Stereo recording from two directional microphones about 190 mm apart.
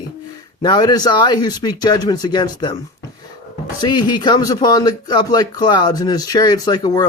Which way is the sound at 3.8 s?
25° left (ahead or behind).